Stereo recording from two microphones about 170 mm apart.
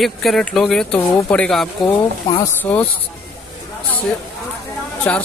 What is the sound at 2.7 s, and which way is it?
Speech, 10° left (ahead or behind).